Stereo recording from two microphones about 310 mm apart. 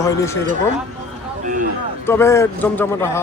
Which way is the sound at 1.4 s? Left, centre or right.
Right.